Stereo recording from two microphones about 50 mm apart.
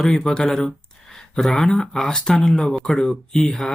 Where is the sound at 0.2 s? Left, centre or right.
Centre.